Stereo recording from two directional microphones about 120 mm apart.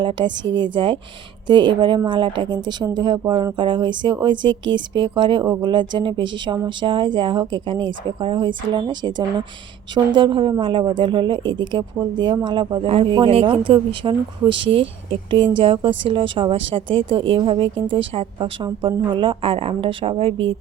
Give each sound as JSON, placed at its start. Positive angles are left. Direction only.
{"t": 0.0, "sound": "speech", "side_deg": -40}